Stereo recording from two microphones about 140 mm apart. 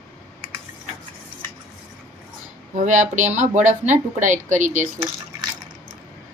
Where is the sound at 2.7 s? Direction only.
65° right (ahead or behind).